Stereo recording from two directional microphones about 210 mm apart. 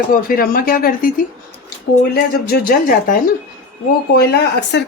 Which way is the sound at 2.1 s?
45° left (ahead or behind).